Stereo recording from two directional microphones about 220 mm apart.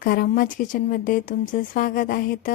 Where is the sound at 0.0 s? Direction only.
40° left (ahead or behind).